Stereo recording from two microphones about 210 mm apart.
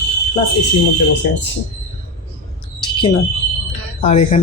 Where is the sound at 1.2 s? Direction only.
50° left (ahead or behind).